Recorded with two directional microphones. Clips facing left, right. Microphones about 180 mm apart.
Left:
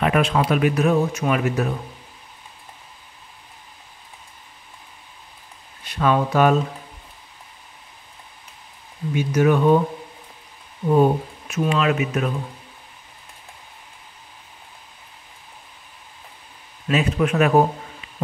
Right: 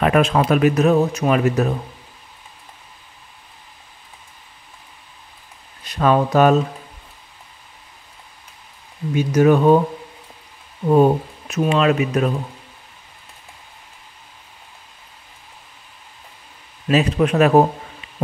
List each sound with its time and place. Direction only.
0.0 s speech: 45° right (ahead or behind)
5.9 s speech: 40° right (ahead or behind)
9.1 s speech: 40° right (ahead or behind)
10.9 s speech: 40° right (ahead or behind)
16.8 s speech: 35° right (ahead or behind)